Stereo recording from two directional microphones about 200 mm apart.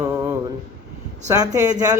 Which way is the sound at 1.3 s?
20° right (ahead or behind).